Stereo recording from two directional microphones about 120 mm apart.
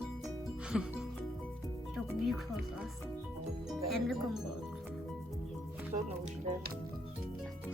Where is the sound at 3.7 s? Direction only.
Centre (ahead or behind).